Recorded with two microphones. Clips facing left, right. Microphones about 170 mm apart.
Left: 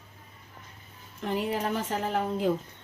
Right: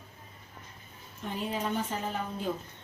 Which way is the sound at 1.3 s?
85° left.